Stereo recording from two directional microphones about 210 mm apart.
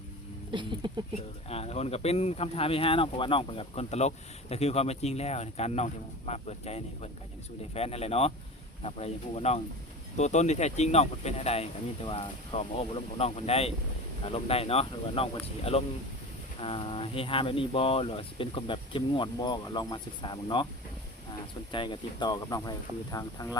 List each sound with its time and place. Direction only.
0.5 s speech: 20° right (ahead or behind)
1.5 s speech: 30° left (ahead or behind)
21.7 s speech: 20° left (ahead or behind)